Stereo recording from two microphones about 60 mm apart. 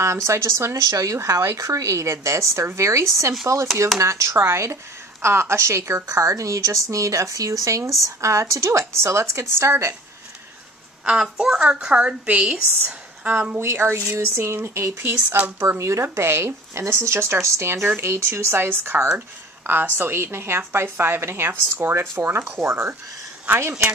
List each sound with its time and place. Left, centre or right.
0.0 s a woman's voice: right
11.1 s a woman's voice: centre
13.6 s speech: right
15.2 s speech: right
15.8 s speech: right
23.5 s speech: right